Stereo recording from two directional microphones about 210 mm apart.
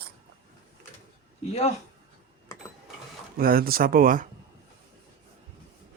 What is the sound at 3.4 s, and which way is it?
Speech, 45° right (ahead or behind).